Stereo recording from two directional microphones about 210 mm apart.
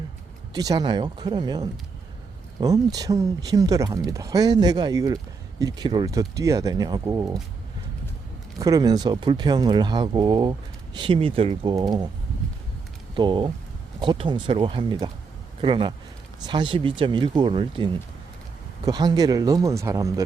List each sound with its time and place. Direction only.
0.5 s speech: 20° right (ahead or behind)
8.5 s speech: 15° right (ahead or behind)
13.1 s speech: 20° right (ahead or behind)
18.9 s speech: 20° right (ahead or behind)